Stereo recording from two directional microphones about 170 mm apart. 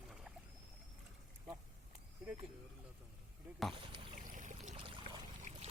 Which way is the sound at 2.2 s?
5° right (ahead or behind).